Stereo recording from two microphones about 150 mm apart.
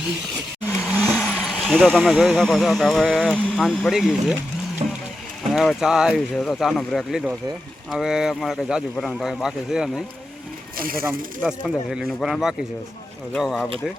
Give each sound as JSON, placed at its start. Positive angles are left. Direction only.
{"t": 1.1, "sound": "speech", "side_deg": -5}
{"t": 4.8, "sound": "a sound", "side_deg": -40}
{"t": 5.5, "sound": "speech", "side_deg": -5}
{"t": 10.8, "sound": "speech", "side_deg": -75}
{"t": 11.4, "sound": "speech", "side_deg": -5}